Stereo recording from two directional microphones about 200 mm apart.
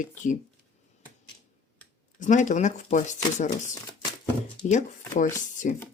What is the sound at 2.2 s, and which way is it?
Speech, 40° left (ahead or behind).